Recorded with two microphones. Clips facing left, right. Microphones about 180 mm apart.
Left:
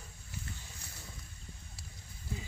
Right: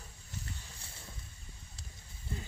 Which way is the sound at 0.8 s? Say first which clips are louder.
Left 1 dB; 30° right (ahead or behind).